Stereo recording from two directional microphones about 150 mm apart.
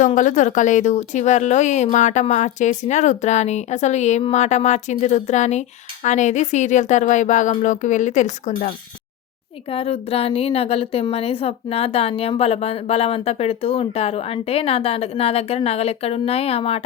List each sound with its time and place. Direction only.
0.0 s speech: 60° left (ahead or behind)
9.6 s a woman's voice: 40° left (ahead or behind)